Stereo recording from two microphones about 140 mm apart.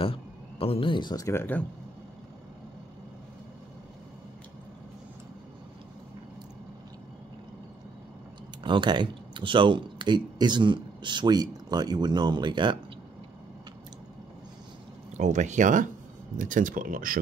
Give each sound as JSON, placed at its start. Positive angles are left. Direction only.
{"t": 0.0, "sound": "speech", "side_deg": 40}
{"t": 8.6, "sound": "speech", "side_deg": -35}
{"t": 15.1, "sound": "speech", "side_deg": -60}